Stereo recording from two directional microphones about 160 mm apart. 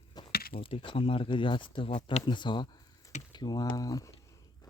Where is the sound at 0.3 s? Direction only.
70° left (ahead or behind).